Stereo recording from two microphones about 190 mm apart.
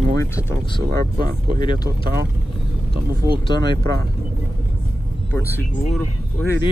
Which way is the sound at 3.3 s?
25° left (ahead or behind).